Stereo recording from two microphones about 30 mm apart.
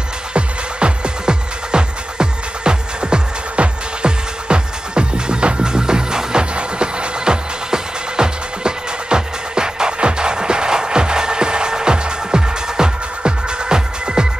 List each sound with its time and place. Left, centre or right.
0.3 s music: right